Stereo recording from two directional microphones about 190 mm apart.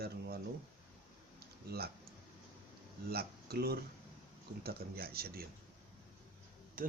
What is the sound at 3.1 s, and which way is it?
Speech, 55° right (ahead or behind).